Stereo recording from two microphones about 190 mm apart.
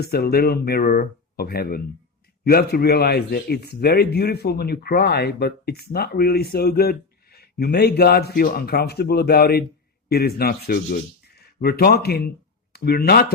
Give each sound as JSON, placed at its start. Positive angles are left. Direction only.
{"t": 0.0, "sound": "a man's voice", "side_deg": 55}